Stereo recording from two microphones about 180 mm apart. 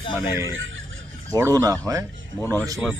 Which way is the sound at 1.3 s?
20° right (ahead or behind).